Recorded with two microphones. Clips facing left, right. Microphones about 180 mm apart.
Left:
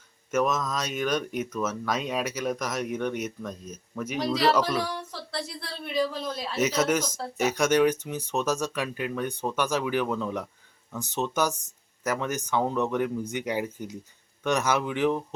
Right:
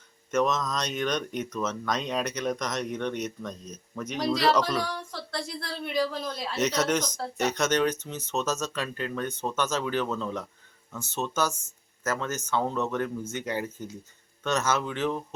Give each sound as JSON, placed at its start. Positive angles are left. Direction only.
{"t": 0.3, "sound": "speech", "side_deg": 5}